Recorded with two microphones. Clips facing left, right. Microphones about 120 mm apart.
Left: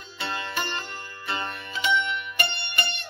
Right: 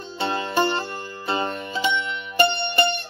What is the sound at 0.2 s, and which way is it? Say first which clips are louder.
Music: right 9 dB; 30° right (ahead or behind).